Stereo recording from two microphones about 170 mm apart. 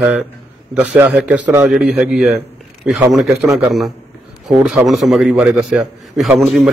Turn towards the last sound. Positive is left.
turn(degrees=0)  # may be behind; listen again after turning